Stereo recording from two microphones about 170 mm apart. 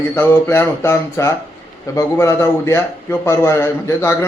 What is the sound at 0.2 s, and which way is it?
A man's voice, 15° left (ahead or behind).